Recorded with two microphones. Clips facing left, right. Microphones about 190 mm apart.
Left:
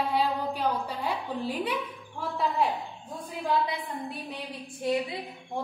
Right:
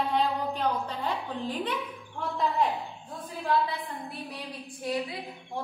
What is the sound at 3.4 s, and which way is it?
A woman's voice, 15° left (ahead or behind).